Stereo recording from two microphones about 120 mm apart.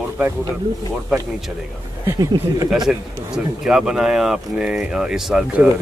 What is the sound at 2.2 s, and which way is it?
Speech, 30° right (ahead or behind).